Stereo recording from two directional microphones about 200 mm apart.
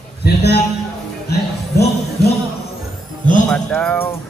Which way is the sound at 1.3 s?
55° left (ahead or behind).